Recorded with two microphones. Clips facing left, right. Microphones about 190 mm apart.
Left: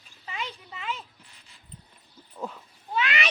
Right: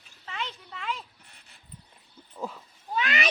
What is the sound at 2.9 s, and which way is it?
Speech, 35° right (ahead or behind).